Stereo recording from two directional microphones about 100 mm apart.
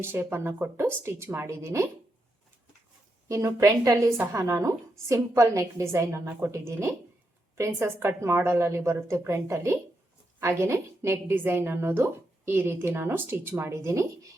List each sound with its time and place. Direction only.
0.0 s a woman's voice: 25° right (ahead or behind)
3.2 s a woman's voice: 35° right (ahead or behind)